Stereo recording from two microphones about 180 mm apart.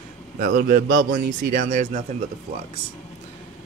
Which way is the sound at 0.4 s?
50° right (ahead or behind).